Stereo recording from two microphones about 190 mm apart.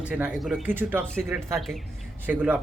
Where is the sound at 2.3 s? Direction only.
5° right (ahead or behind).